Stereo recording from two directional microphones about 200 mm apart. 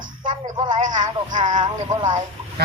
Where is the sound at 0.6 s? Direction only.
40° right (ahead or behind).